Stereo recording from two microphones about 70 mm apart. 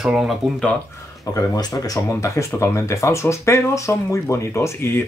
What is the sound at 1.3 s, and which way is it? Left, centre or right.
Speech, left.